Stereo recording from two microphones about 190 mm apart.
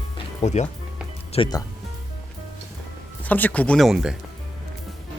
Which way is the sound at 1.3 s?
25° left (ahead or behind).